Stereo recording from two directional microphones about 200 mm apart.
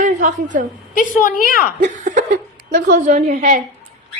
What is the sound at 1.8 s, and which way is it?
A woman's voice, 40° right (ahead or behind).